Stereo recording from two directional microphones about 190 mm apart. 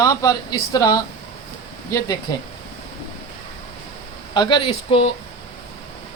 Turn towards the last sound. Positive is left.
turn(degrees=30)  # may be behind; listen again after turning